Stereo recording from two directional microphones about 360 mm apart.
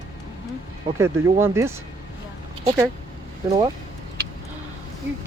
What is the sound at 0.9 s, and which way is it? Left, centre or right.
Speech, centre.